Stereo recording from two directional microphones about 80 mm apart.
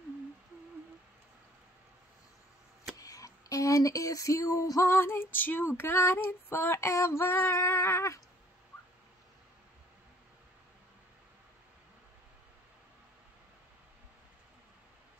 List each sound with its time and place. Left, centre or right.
3.0 s speech: left
5.8 s female singing: left